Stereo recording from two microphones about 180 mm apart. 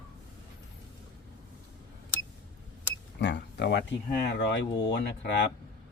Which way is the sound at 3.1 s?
75° left (ahead or behind).